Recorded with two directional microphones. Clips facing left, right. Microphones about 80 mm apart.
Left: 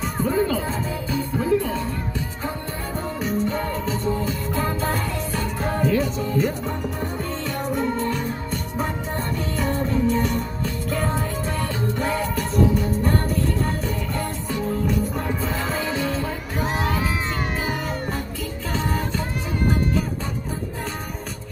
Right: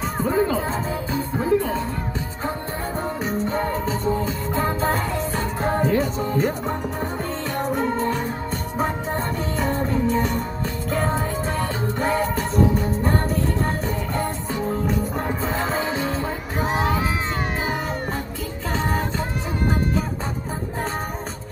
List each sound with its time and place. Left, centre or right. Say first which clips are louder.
0.2 s music: right 1 dB; right
3.3 s music: even; right
7.5 s music: right 2 dB; right
16.5 s crowd: right 2 dB; right
18.7 s music: right 2 dB; right